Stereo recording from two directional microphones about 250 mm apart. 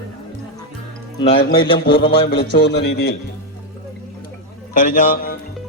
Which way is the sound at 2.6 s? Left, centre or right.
Left.